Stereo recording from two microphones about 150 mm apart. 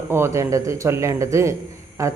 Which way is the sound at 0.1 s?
20° right (ahead or behind).